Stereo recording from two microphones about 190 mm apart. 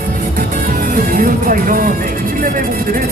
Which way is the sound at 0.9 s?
45° right (ahead or behind).